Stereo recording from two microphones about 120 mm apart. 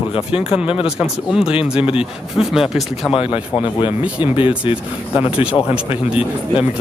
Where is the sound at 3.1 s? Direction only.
55° left (ahead or behind).